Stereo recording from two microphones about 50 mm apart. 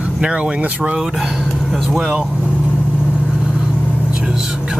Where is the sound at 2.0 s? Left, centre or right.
Centre.